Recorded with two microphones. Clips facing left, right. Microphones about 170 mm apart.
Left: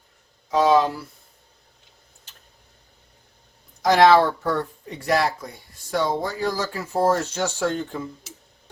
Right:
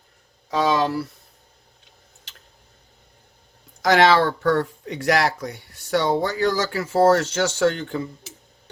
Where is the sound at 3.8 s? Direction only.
90° right.